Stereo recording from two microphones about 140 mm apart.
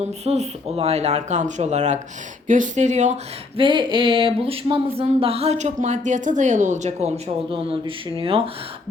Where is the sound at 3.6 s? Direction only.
35° right (ahead or behind); by 7.1 s 55° right (ahead or behind).